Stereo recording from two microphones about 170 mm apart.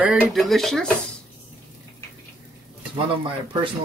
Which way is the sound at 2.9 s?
30° right (ahead or behind).